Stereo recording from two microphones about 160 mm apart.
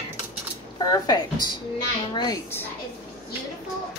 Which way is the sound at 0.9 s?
25° left (ahead or behind).